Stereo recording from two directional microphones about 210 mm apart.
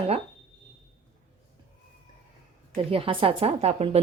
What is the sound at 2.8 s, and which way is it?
A woman's voice, 25° right (ahead or behind).